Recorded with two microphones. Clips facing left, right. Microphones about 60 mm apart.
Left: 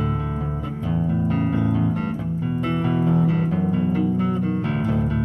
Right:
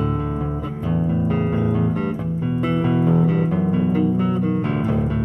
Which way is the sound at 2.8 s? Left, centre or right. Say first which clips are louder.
Right 2 dB; right.